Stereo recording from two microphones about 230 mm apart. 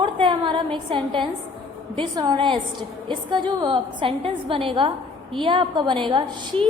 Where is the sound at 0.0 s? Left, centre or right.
Right.